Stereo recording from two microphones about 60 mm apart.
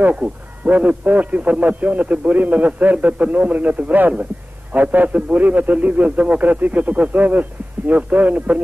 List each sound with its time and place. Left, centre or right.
0.1 s a man's voice: right